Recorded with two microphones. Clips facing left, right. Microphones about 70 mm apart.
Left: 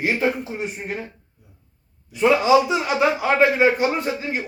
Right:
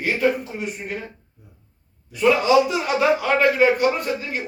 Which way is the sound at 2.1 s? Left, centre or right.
Left.